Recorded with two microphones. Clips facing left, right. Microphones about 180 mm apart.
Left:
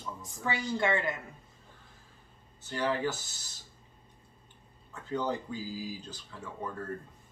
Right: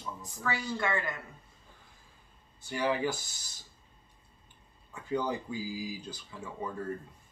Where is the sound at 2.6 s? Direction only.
10° right (ahead or behind).